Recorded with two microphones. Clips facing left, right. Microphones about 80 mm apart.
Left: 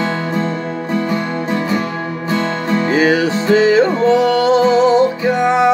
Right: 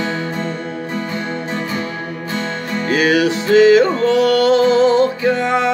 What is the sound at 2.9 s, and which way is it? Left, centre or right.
Music, left.